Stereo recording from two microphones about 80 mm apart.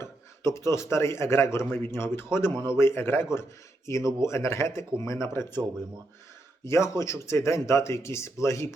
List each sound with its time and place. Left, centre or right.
0.0 s speech: left
6.7 s speech: left